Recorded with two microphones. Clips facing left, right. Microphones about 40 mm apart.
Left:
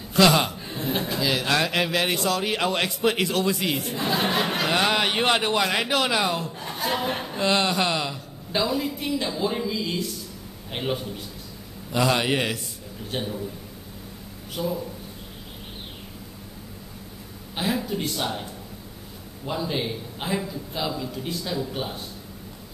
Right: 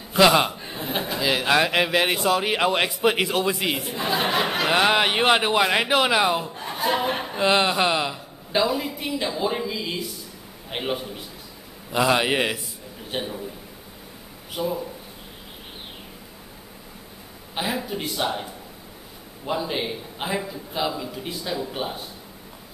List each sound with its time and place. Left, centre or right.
0.1 s a man's voice: centre
14.5 s a man's voice: centre
17.6 s a man's voice: centre